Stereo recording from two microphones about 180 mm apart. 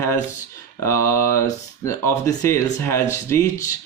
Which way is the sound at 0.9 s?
15° left (ahead or behind).